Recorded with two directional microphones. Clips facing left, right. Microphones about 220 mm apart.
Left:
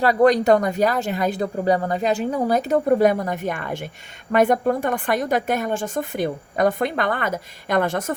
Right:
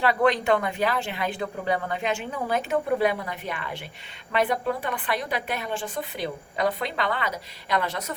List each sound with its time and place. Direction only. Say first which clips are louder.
0.0 s a woman's voice: left 6 dB; 40° left (ahead or behind)